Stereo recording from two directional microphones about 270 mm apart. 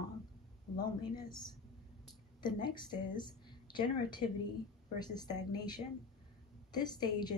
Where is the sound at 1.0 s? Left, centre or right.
Centre.